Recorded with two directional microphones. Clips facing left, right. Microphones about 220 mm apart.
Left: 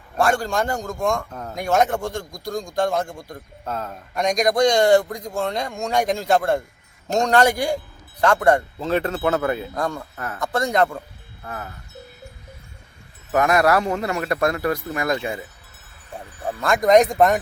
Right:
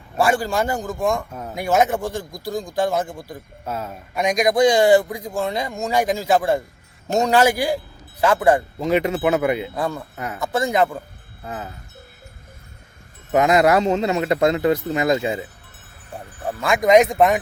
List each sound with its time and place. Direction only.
0.2 s speech: 5° right (ahead or behind)
9.7 s speech: 5° right (ahead or behind)
10.2 s speech: 15° right (ahead or behind)
10.4 s speech: 5° right (ahead or behind)
11.4 s a man's voice: 20° right (ahead or behind)
13.3 s a man's voice: 20° right (ahead or behind)
16.1 s speech: centre (ahead or behind)